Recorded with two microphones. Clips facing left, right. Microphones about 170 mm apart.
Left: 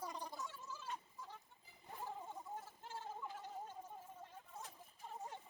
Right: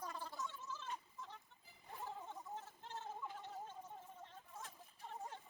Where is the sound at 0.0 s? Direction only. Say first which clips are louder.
Even; 15° left (ahead or behind).